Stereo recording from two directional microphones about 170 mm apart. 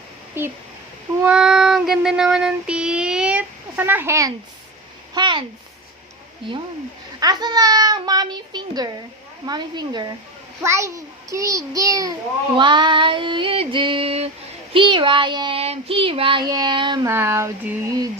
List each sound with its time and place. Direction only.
0.4 s speech: 15° right (ahead or behind)
1.2 s child singing: 5° right (ahead or behind)
5.1 s child singing: 25° right (ahead or behind)
7.2 s child singing: 25° right (ahead or behind)
17.1 s speech: 15° right (ahead or behind)